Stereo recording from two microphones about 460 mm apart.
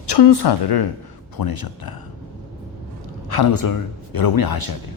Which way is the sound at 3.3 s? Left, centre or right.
Left.